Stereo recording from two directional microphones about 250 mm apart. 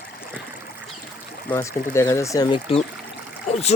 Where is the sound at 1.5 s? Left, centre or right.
Centre.